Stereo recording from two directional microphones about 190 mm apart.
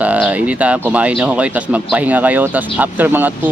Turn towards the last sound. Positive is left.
turn(degrees=-10)  # may be behind; listen again after turning